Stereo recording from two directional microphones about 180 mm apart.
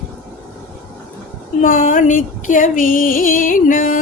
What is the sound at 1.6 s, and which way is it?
Speech, 45° left (ahead or behind).